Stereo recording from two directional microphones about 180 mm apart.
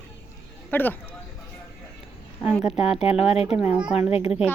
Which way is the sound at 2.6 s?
35° left (ahead or behind).